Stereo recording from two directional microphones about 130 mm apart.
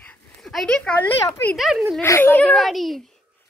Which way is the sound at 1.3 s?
15° left (ahead or behind).